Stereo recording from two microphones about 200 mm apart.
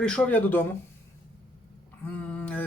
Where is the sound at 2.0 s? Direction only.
5° left (ahead or behind).